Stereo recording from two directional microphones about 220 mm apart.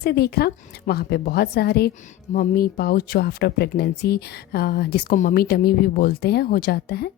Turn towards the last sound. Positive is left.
turn(degrees=45)  # may be behind; listen again after turning